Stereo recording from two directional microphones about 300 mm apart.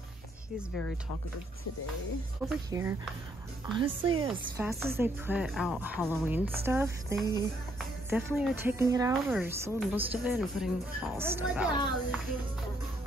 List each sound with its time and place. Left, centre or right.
0.6 s speech: centre
2.4 s speech: centre